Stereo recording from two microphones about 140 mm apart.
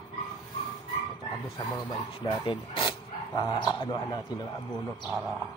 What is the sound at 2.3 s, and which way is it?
Speech, 35° left (ahead or behind).